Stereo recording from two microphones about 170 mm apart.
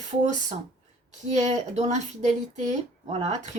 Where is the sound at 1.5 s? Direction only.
40° right (ahead or behind).